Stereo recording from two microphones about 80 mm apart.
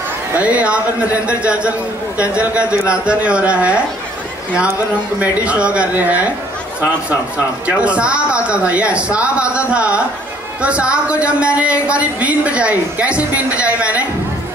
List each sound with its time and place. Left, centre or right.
0.3 s speech: centre
2.7 s speech: left
3.1 s speech: centre
5.4 s speech: centre
7.6 s speech: centre